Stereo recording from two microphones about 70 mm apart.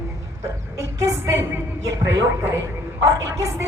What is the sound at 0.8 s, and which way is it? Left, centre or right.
A woman's voice, right.